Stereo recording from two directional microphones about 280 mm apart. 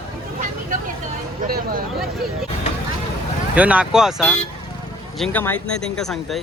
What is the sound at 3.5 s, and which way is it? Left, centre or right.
Speech, centre.